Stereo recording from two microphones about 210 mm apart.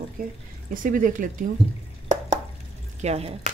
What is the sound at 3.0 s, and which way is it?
Speech, 30° right (ahead or behind).